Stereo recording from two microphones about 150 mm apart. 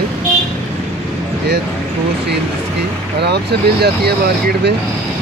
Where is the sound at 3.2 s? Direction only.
90° right.